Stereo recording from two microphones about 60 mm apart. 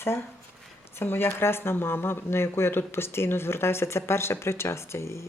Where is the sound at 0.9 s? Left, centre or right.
Left.